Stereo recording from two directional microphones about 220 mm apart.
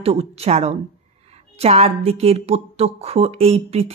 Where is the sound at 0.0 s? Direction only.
25° right (ahead or behind).